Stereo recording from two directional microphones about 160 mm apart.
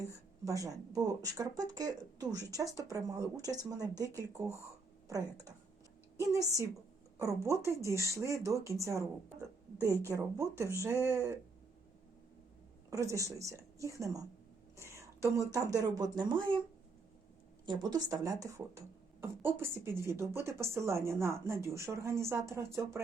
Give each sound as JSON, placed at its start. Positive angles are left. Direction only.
{"t": 0.4, "sound": "speech", "side_deg": -20}
{"t": 6.1, "sound": "speech", "side_deg": -20}
{"t": 12.9, "sound": "speech", "side_deg": -20}
{"t": 17.7, "sound": "speech", "side_deg": -25}